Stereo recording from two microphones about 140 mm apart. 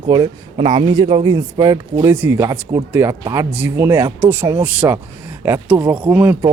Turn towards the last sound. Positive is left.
turn(degrees=-10)  # may be behind; listen again after turning